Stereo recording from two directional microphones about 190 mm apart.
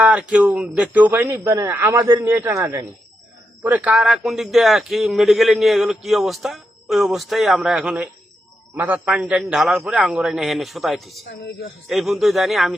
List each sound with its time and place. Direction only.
0.0 s a man's voice: 5° right (ahead or behind)
11.3 s speech: 60° left (ahead or behind)
11.9 s a man's voice: centre (ahead or behind)